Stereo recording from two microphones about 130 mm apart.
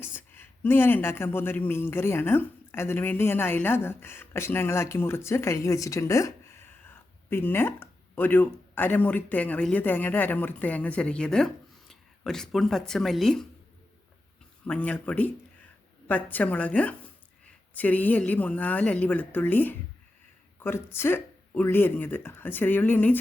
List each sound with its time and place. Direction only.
0.0 s a woman's voice: 15° left (ahead or behind)
14.7 s speech: 10° left (ahead or behind)